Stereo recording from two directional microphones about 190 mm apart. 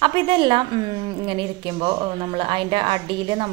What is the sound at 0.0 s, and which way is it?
A woman's voice, 25° right (ahead or behind).